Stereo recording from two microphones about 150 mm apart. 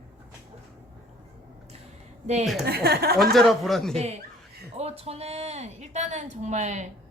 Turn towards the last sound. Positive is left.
turn(degrees=-50)  # may be behind; listen again after turning